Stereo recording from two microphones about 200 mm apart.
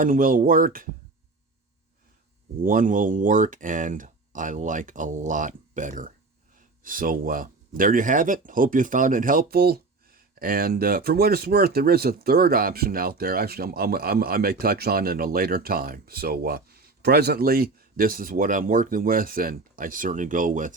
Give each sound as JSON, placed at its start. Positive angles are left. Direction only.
{"t": 0.0, "sound": "speech", "side_deg": -45}
{"t": 2.6, "sound": "speech", "side_deg": -40}